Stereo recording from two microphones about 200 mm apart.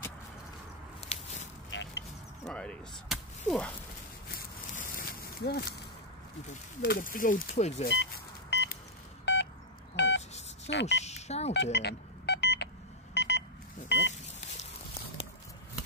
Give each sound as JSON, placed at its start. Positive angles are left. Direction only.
{"t": 1.0, "sound": "biting", "side_deg": 35}
{"t": 1.7, "sound": "a sound", "side_deg": 65}
{"t": 2.4, "sound": "speech", "side_deg": 5}
{"t": 4.3, "sound": "a sound", "side_deg": 45}
{"t": 6.5, "sound": "speech", "side_deg": 45}
{"t": 7.8, "sound": "vehicle", "side_deg": 60}
{"t": 9.2, "sound": "telephone dialing", "side_deg": 60}
{"t": 9.9, "sound": "beep", "side_deg": 60}
{"t": 10.7, "sound": "speech", "side_deg": 60}
{"t": 11.1, "sound": "telephone dialing", "side_deg": 35}
{"t": 11.5, "sound": "telephone dialing", "side_deg": 60}
{"t": 13.1, "sound": "a sound", "side_deg": 60}
{"t": 13.8, "sound": "vehicle", "side_deg": 60}